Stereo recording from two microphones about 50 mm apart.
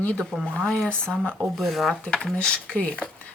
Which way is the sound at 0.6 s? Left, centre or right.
Centre.